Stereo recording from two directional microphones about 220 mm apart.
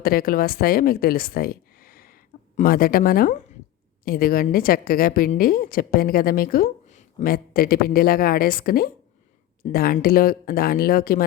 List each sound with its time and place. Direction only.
0.0 s a woman's voice: 40° left (ahead or behind)